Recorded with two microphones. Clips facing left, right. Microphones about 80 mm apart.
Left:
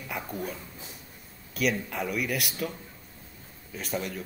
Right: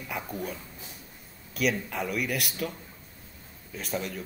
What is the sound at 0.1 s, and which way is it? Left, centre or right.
Speech, centre.